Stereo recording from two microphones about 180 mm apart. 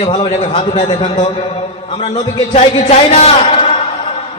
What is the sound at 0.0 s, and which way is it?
A man's voice, 30° left (ahead or behind).